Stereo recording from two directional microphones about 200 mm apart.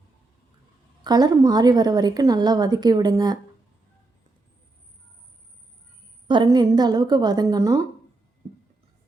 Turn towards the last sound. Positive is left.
turn(degrees=-15)  # may be behind; listen again after turning